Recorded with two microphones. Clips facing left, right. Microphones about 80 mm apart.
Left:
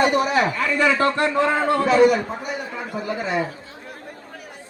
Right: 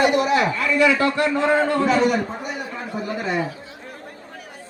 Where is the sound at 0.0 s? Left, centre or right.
Left.